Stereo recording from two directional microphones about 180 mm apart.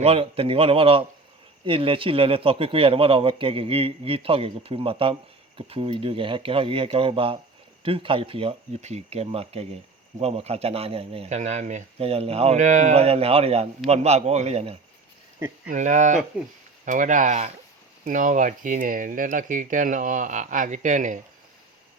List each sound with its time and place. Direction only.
0.0 s a man's voice: 35° right (ahead or behind)
15.4 s speech: 15° right (ahead or behind)
15.7 s speech: 45° right (ahead or behind)